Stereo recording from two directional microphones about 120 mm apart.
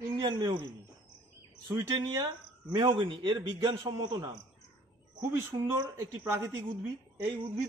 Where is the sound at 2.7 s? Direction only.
40° right (ahead or behind).